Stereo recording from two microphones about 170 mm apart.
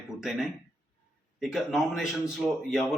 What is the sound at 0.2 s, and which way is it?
A man's voice, 5° right (ahead or behind).